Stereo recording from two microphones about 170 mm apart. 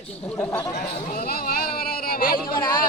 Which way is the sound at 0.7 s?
55° left (ahead or behind).